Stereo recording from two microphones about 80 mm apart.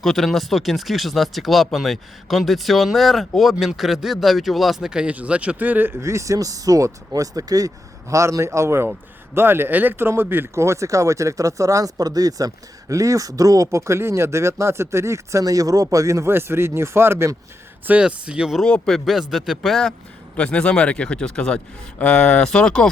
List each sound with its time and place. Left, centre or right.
0.0 s speech: centre; by 5.9 s right
6.0 s speech: right
8.1 s speech: right
17.8 s speech: centre
18.6 s speech: centre
20.3 s a man's voice: centre